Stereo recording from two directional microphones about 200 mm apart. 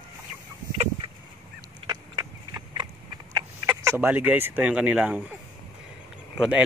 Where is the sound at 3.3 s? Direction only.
10° right (ahead or behind).